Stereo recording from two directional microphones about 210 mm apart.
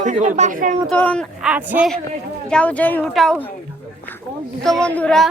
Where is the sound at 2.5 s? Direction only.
5° left (ahead or behind).